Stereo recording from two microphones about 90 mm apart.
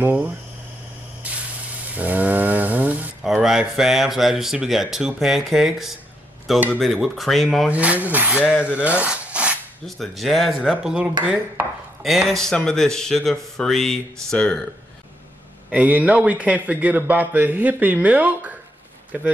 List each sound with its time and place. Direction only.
0.0 s speech: 15° right (ahead or behind)
1.2 s spray: 15° right (ahead or behind)
2.0 s a sound: 20° right (ahead or behind)
3.3 s speech: 5° right (ahead or behind)
7.7 s a man's voice: 15° right (ahead or behind)
8.8 s rub: 10° right (ahead or behind)
9.8 s a man's voice: centre (ahead or behind)
15.7 s a man's voice: 15° right (ahead or behind)